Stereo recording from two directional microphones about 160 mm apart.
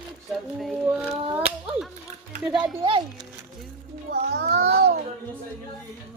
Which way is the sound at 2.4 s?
5° right (ahead or behind).